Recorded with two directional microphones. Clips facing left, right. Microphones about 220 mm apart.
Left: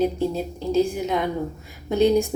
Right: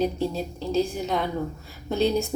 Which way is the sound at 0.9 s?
10° left (ahead or behind).